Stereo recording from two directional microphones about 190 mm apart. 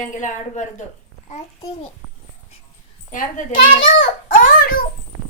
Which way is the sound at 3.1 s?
45° left (ahead or behind).